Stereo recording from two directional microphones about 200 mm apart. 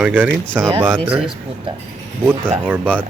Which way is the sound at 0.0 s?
10° right (ahead or behind).